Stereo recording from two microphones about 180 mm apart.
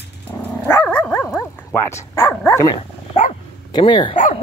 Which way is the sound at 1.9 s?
10° left (ahead or behind).